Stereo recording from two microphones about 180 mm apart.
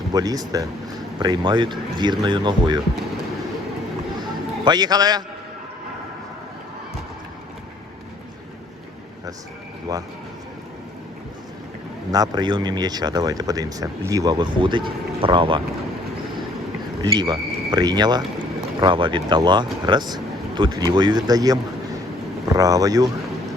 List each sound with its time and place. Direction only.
0.1 s speech: 20° right (ahead or behind)
4.2 s a sound: 25° right (ahead or behind)
9.9 s speech: 20° right (ahead or behind)
12.1 s speech: 20° right (ahead or behind)
17.0 s speech: 25° right (ahead or behind)